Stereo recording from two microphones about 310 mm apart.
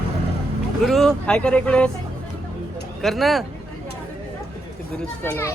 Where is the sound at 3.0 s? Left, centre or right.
Centre.